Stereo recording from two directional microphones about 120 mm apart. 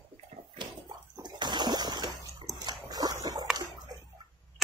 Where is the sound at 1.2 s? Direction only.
40° right (ahead or behind).